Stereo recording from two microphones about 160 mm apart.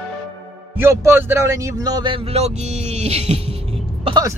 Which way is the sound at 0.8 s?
15° right (ahead or behind).